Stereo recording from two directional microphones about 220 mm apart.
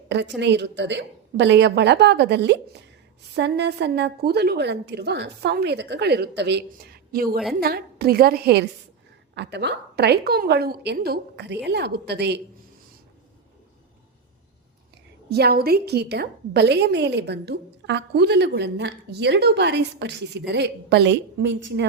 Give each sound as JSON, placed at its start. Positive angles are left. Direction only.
{"t": 0.1, "sound": "a woman's voice", "side_deg": -50}
{"t": 15.3, "sound": "a woman's voice", "side_deg": -45}